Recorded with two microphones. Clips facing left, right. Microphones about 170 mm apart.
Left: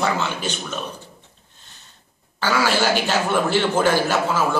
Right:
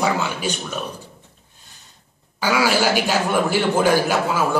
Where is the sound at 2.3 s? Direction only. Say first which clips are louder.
Right 1 dB; 10° right (ahead or behind).